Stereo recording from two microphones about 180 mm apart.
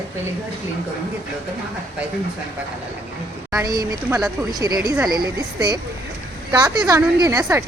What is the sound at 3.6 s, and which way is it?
A woman's voice, 20° right (ahead or behind).